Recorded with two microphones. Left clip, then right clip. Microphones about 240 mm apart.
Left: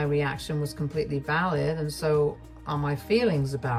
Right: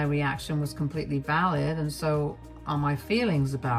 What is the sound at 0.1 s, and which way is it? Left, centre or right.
Speech, right.